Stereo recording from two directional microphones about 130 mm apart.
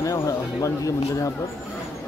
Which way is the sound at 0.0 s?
25° left (ahead or behind).